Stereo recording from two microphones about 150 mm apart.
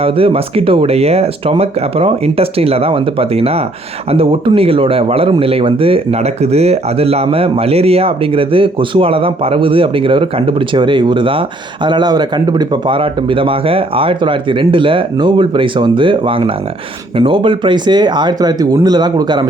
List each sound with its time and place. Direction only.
0.0 s speech: 40° right (ahead or behind)